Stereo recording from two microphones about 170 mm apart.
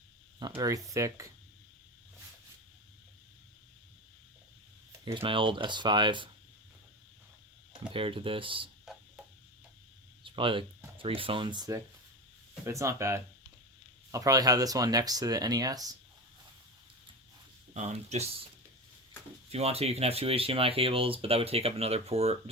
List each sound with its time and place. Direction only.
0.3 s speech: 25° right (ahead or behind)
5.0 s speech: 30° right (ahead or behind)
7.9 s speech: 30° right (ahead or behind)
10.2 s speech: 30° right (ahead or behind)
17.7 s speech: 40° right (ahead or behind)
19.5 s speech: 35° right (ahead or behind)